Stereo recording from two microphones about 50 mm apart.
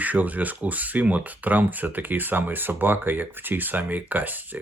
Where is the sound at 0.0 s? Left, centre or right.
Right.